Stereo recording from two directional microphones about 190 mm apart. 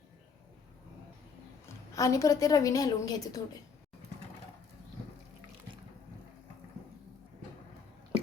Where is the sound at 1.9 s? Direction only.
15° left (ahead or behind).